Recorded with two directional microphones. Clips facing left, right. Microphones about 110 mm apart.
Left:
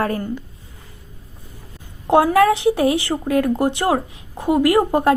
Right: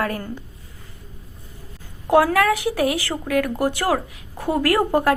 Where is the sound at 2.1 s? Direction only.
25° left (ahead or behind).